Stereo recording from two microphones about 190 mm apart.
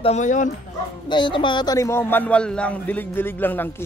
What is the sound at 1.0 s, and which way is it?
A man's voice, 25° left (ahead or behind).